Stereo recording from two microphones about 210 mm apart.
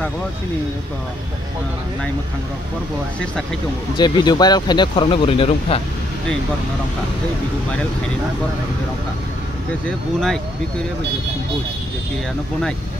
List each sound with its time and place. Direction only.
3.9 s speech: 20° left (ahead or behind)
9.8 s speech: centre (ahead or behind)